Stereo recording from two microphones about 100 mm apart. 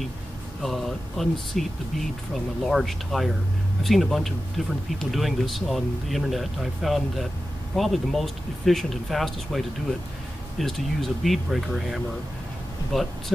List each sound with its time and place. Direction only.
0.6 s speech: centre (ahead or behind)